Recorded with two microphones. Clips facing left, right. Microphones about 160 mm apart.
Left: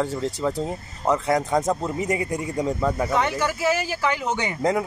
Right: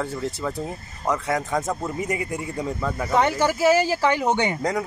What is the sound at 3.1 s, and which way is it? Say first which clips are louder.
Speech: right 3 dB; 30° right (ahead or behind).